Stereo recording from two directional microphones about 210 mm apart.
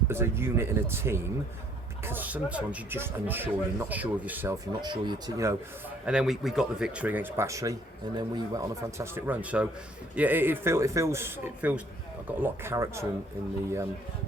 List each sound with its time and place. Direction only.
0.1 s speech: 10° right (ahead or behind)
6.1 s speech: 5° right (ahead or behind)